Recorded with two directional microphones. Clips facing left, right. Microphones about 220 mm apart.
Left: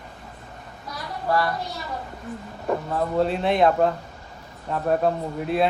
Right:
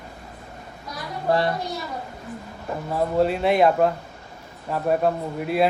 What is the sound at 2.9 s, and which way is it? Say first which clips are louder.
A man's voice: right 4 dB; 5° right (ahead or behind).